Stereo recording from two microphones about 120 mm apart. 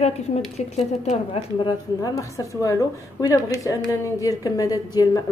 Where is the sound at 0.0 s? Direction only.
65° left (ahead or behind).